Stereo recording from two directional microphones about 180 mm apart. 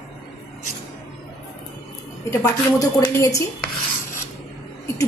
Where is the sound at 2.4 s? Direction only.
20° left (ahead or behind).